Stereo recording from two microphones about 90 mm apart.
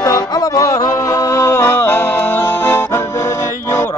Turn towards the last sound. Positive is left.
turn(degrees=30)  # may be behind; listen again after turning